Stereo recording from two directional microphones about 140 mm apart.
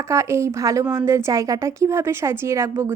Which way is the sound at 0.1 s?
20° right (ahead or behind).